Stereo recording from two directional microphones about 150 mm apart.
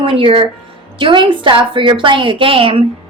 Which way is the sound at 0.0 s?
35° right (ahead or behind).